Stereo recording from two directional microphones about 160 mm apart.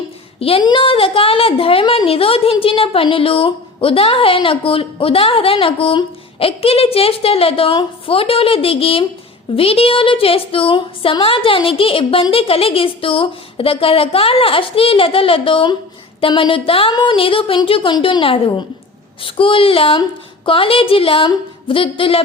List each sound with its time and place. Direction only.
0.3 s a woman's voice: 35° left (ahead or behind)